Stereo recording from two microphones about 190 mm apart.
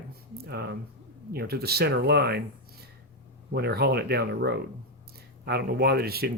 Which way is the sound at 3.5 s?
60° right (ahead or behind).